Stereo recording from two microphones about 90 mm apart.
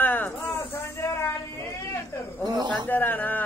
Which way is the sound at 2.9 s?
20° left (ahead or behind).